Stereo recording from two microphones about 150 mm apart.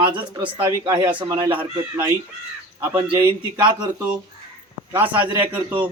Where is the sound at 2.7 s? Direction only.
20° right (ahead or behind).